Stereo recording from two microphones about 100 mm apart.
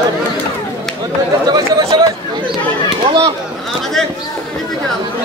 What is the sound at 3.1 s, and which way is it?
Chop, 60° right (ahead or behind).